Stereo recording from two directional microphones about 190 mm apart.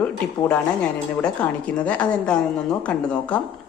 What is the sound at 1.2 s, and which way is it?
A woman's voice, 5° left (ahead or behind).